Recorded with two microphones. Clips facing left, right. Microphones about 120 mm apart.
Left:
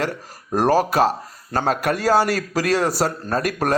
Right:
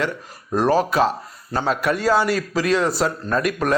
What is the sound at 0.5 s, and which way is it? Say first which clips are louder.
Speech: left 1 dB; 45° left (ahead or behind).